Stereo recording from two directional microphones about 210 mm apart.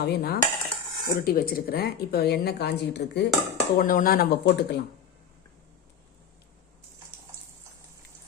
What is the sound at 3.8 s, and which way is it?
Speech, 40° left (ahead or behind).